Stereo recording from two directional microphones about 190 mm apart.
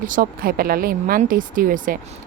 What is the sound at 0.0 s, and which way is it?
Speech, 50° right (ahead or behind).